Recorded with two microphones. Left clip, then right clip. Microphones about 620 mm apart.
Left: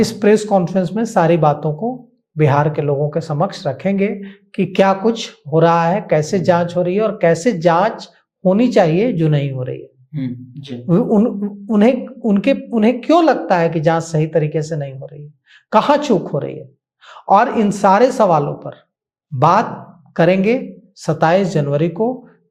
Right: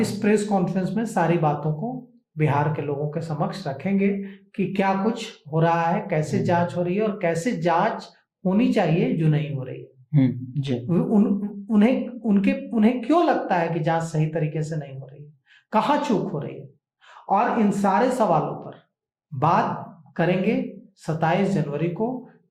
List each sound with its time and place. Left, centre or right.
0.0 s a woman's voice: left
10.1 s speech: right
10.8 s a woman's voice: left
17.8 s speech: left